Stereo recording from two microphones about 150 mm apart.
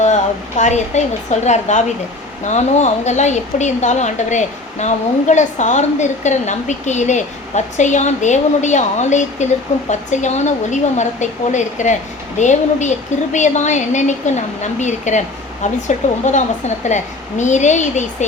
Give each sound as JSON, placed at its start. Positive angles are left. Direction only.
{"t": 0.0, "sound": "a woman's voice", "side_deg": 50}